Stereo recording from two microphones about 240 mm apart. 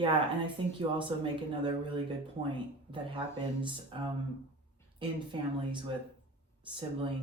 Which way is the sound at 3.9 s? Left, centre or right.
Right.